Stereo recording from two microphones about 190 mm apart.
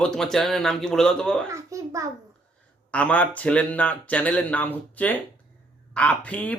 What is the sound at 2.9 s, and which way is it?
Speech, 5° left (ahead or behind).